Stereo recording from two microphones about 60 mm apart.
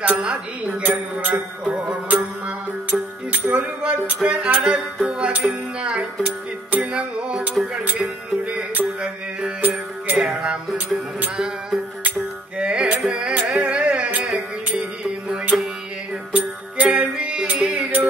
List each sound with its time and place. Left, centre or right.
0.2 s speech: centre
0.8 s speech: right
1.7 s music: right
5.0 s speech: centre
6.7 s music: right
9.6 s music: right
10.1 s music: centre
15.5 s music: centre
16.3 s music: right